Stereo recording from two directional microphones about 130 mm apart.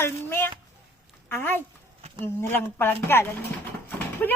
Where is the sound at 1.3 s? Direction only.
15° left (ahead or behind).